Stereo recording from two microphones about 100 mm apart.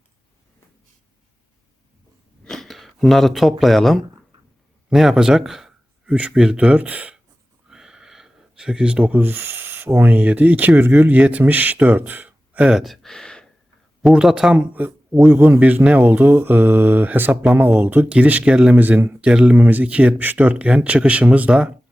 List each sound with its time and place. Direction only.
2.4 s a sound: 5° left (ahead or behind)
3.6 s speech: centre (ahead or behind)
14.0 s speech: 5° right (ahead or behind)
15.3 s mantra: 20° right (ahead or behind)
19.3 s speech: 10° right (ahead or behind)